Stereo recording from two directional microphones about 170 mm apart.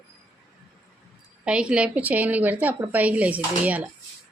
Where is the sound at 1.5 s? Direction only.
5° right (ahead or behind).